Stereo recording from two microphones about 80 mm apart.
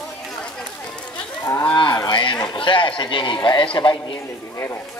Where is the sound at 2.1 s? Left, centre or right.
Left.